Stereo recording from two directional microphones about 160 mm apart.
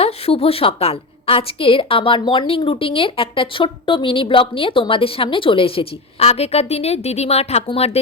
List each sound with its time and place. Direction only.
0.0 s a woman's voice: 40° left (ahead or behind)